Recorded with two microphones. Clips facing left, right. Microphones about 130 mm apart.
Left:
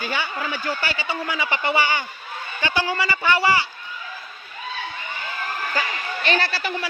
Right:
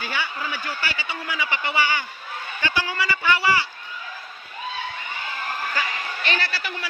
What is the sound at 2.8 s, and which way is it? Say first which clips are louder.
Speech: even; 30° left (ahead or behind).